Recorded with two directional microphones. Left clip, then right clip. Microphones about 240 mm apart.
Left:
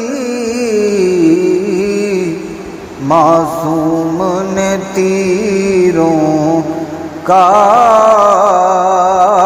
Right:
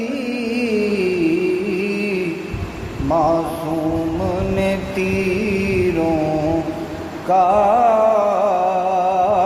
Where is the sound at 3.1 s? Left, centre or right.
Left.